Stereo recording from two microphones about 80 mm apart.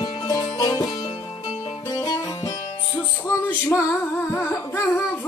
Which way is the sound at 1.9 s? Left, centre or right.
Left.